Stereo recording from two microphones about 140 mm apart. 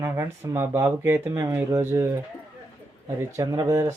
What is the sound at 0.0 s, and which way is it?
Speech, 20° right (ahead or behind).